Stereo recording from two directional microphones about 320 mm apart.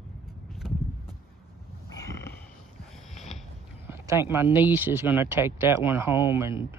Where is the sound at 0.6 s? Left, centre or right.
Centre.